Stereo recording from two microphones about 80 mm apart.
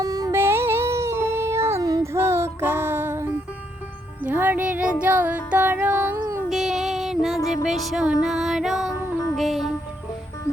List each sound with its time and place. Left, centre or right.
0.0 s music: right
0.3 s a sound: right
1.8 s a sound: right
2.1 s music: right
6.5 s music: centre
8.0 s female singing: centre
9.3 s music: centre